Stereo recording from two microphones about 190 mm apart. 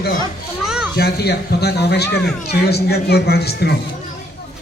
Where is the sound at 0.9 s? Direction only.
60° left (ahead or behind).